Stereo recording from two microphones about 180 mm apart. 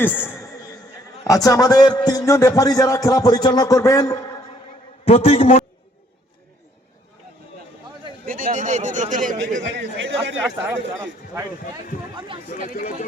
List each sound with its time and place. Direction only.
0.0 s a sound: 10° left (ahead or behind)
1.3 s music: 20° left (ahead or behind)
5.0 s a man's voice: 30° left (ahead or behind)
8.2 s a man's voice: 50° right (ahead or behind)
9.7 s speech: 80° right
12.6 s speech: 50° left (ahead or behind)